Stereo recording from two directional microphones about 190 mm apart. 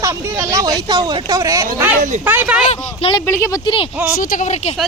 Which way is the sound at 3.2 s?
15° left (ahead or behind).